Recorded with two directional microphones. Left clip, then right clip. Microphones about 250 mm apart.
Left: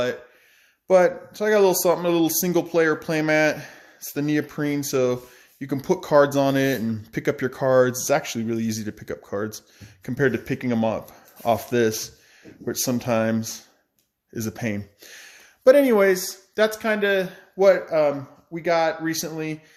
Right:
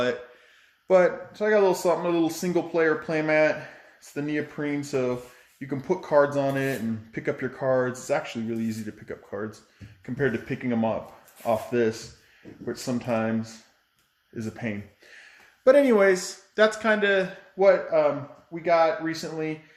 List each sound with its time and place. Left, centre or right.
0.9 s speech: left